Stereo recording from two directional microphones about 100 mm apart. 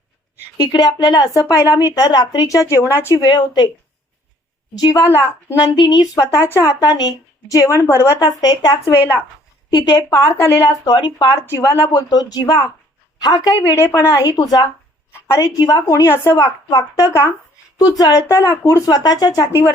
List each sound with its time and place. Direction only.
0.5 s a woman's voice: 40° left (ahead or behind)
3.2 s speech: 45° left (ahead or behind)
4.8 s speech: 45° left (ahead or behind)
5.0 s speech: 25° left (ahead or behind)
5.7 s a woman's voice: 45° left (ahead or behind)
9.6 s speech: 45° left (ahead or behind)
10.2 s speech: 25° left (ahead or behind)
10.8 s speech: 45° left (ahead or behind)
11.3 s a woman's voice: 25° left (ahead or behind); by 13.6 s 40° left (ahead or behind)
13.7 s speech: 25° left (ahead or behind)
14.3 s a woman's voice: 40° left (ahead or behind)
16.3 s a woman's voice: 40° left (ahead or behind)
17.1 s speech: 25° left (ahead or behind)
17.7 s a woman's voice: 40° left (ahead or behind)